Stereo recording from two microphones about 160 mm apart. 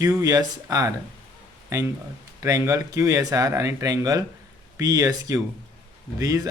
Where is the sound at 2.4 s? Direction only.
20° right (ahead or behind).